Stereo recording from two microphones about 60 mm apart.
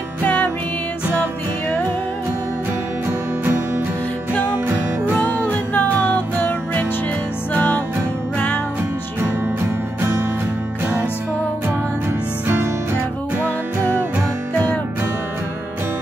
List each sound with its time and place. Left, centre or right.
5.2 s music: left